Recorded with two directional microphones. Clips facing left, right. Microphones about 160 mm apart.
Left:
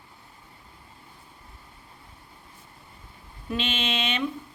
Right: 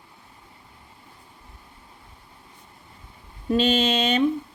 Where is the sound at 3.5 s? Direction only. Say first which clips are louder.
Right 9 dB; 40° right (ahead or behind).